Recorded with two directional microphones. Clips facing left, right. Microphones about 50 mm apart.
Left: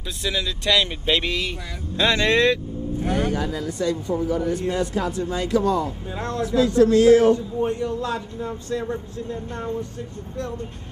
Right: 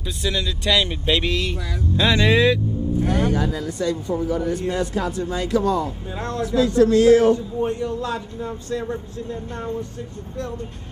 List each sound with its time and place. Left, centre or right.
0.0 s a man's voice: centre
1.6 s speech: left
2.0 s speech: centre
3.8 s speech: centre
5.3 s speech: left
6.1 s a man's voice: centre
6.4 s speech: centre
7.2 s a man's voice: centre